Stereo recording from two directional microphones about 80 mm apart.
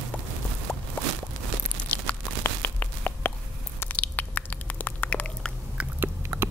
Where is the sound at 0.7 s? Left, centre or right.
Centre.